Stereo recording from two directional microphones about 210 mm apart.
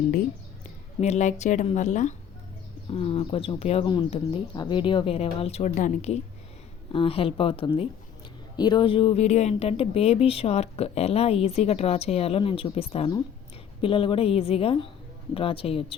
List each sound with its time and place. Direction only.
1.0 s a woman's voice: 35° left (ahead or behind)